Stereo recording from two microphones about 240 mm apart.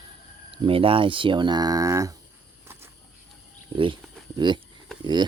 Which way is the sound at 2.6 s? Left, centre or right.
Centre.